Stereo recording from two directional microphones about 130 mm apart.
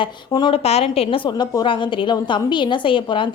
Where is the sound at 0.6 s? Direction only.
50° left (ahead or behind).